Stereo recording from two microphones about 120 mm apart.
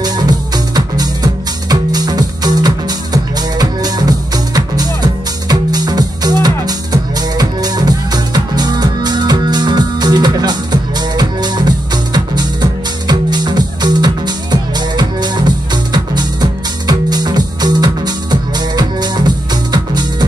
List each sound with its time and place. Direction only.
0.0 s music: 35° right (ahead or behind)